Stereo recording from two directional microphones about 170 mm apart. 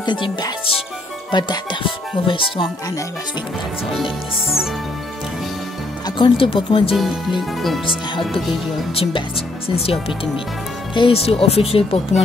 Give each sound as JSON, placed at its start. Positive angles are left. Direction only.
{"t": 0.0, "sound": "speech", "side_deg": 25}
{"t": 6.0, "sound": "speech", "side_deg": 30}
{"t": 7.0, "sound": "speech", "side_deg": 0}
{"t": 8.9, "sound": "speech", "side_deg": 35}